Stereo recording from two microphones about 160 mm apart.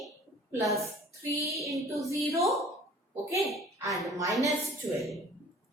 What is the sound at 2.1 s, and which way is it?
Speech, 20° right (ahead or behind).